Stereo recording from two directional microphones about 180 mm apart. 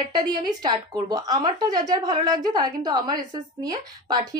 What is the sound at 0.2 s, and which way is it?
A woman's voice, 25° right (ahead or behind).